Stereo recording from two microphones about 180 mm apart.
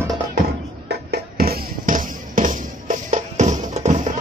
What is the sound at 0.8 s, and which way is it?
Music, 60° right (ahead or behind).